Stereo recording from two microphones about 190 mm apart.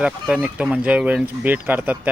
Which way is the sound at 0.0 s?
5° right (ahead or behind).